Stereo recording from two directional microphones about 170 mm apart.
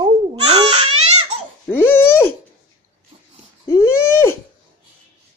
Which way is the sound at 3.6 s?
15° left (ahead or behind).